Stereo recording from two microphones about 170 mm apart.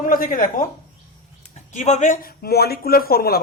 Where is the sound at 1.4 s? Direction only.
40° left (ahead or behind).